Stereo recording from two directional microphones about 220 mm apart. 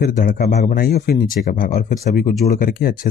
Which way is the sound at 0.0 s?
40° left (ahead or behind).